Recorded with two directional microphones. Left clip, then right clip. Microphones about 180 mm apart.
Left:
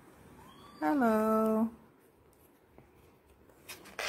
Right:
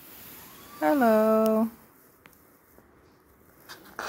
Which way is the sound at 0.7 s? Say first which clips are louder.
Right 8 dB; 30° right (ahead or behind).